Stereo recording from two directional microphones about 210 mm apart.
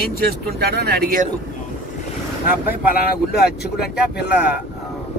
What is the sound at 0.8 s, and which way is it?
Speech, 45° right (ahead or behind).